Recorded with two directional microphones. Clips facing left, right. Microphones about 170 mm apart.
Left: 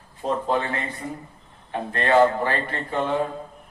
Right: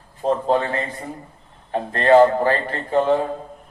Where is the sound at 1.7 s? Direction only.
35° right (ahead or behind).